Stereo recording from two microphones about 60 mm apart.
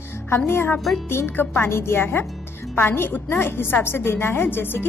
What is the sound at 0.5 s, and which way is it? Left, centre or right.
Speech, left.